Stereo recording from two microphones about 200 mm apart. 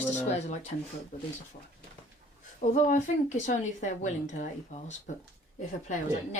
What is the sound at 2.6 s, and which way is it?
Speech, 35° left (ahead or behind).